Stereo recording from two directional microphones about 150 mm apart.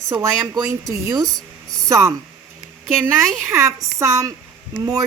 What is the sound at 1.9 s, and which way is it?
Speech, 20° right (ahead or behind).